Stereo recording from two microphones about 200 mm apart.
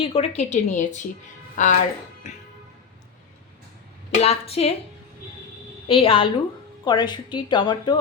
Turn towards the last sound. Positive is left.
turn(degrees=20)  # may be behind; listen again after turning